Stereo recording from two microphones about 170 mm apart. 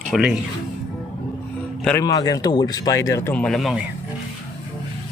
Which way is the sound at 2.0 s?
20° left (ahead or behind).